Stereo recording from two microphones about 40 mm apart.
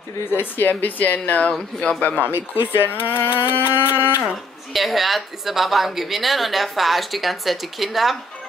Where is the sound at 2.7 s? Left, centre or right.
Left.